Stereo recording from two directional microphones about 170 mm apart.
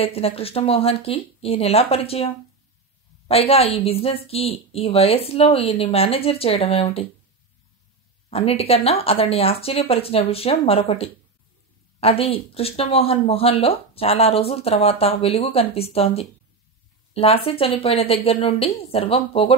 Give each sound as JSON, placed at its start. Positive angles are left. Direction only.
{"t": 0.0, "sound": "speech", "side_deg": 35}
{"t": 8.3, "sound": "speech", "side_deg": 35}